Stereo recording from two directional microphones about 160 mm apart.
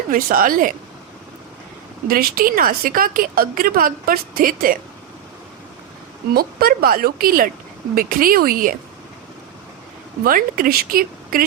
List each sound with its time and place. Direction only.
0.1 s a woman's voice: 60° right (ahead or behind)
2.0 s a woman's voice: 65° right (ahead or behind)
6.3 s a woman's voice: 70° right (ahead or behind)
10.2 s a woman's voice: 60° right (ahead or behind)